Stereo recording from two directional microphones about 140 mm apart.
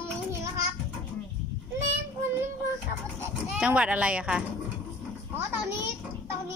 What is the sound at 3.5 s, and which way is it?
Speech, 10° right (ahead or behind).